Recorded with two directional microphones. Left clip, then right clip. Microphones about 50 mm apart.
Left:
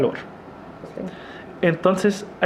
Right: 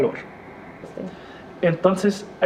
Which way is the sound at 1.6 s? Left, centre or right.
Left.